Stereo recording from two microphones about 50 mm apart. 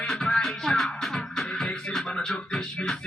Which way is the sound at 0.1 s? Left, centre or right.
Centre.